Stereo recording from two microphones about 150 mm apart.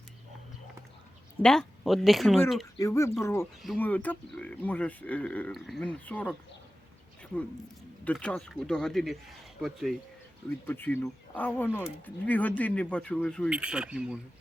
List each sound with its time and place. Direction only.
1.4 s speech: 5° left (ahead or behind)
2.7 s speech: 20° left (ahead or behind)
8.0 s speech: 5° left (ahead or behind)
10.7 s speech: 15° left (ahead or behind)
13.5 s speech: 5° right (ahead or behind)